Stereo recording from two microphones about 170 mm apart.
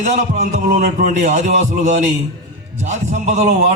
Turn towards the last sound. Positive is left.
turn(degrees=-45)  # may be behind; listen again after turning